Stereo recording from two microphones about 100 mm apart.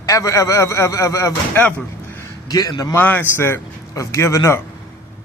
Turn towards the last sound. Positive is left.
turn(degrees=30)  # may be behind; listen again after turning